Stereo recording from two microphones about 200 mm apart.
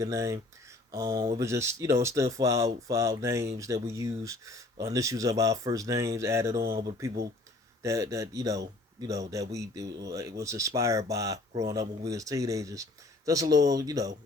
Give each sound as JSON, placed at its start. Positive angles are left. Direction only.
{"t": 0.0, "sound": "speech", "side_deg": -15}